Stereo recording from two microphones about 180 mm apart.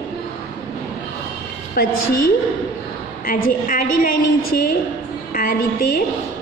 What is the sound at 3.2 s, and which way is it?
A woman's voice, 50° left (ahead or behind).